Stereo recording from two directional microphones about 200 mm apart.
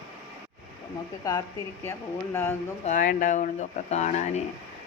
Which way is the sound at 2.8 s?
40° left (ahead or behind).